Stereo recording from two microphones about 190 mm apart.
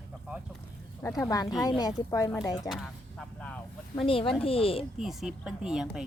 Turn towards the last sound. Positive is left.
turn(degrees=-5)  # may be behind; listen again after turning